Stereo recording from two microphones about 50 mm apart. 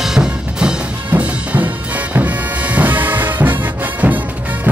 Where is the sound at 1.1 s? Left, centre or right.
Right.